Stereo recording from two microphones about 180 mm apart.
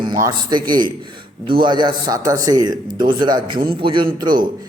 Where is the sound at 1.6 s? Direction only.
25° right (ahead or behind).